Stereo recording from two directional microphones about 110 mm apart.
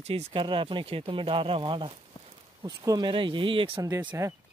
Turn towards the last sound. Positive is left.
turn(degrees=-25)  # may be behind; listen again after turning